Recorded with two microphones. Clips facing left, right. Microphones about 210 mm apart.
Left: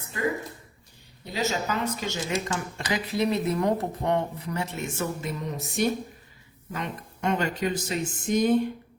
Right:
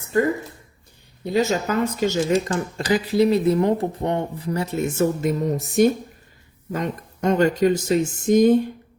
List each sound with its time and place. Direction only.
0.1 s speech: 45° right (ahead or behind)
2.7 s speech: 35° right (ahead or behind)